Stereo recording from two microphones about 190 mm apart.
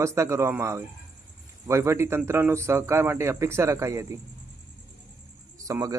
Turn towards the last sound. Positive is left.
turn(degrees=-15)  # may be behind; listen again after turning